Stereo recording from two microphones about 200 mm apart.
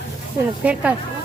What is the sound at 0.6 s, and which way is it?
Speech, 5° right (ahead or behind).